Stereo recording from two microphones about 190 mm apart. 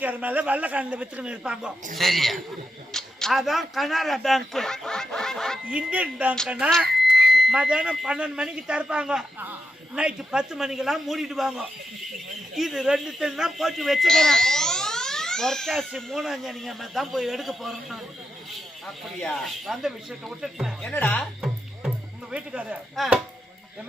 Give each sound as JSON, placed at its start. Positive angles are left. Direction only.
{"t": 0.0, "sound": "a man's voice", "side_deg": -10}
{"t": 6.9, "sound": "smoke detector", "side_deg": -60}
{"t": 7.3, "sound": "speech", "side_deg": 0}
{"t": 19.2, "sound": "speech", "side_deg": 0}
{"t": 20.9, "sound": "speech", "side_deg": 10}
{"t": 22.3, "sound": "speech", "side_deg": -5}